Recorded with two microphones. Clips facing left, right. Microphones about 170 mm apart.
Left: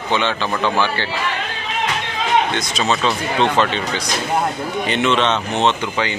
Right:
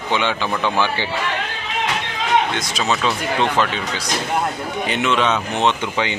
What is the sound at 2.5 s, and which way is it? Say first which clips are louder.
Speech: left 2 dB; 5° right (ahead or behind).